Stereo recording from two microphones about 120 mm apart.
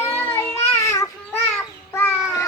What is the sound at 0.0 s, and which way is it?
Child singing, 20° left (ahead or behind).